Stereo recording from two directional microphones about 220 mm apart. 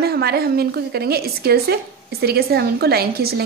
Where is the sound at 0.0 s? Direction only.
45° right (ahead or behind).